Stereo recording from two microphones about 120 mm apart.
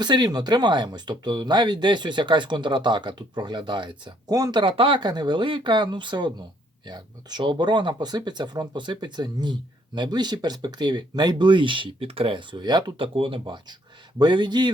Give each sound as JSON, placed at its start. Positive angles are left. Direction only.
{"t": 0.0, "sound": "speech", "side_deg": -35}
{"t": 4.6, "sound": "speech", "side_deg": -45}
{"t": 13.4, "sound": "speech", "side_deg": -35}